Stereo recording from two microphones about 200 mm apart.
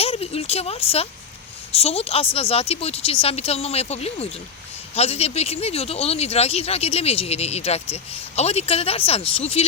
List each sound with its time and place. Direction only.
0.0 s speech: 30° left (ahead or behind)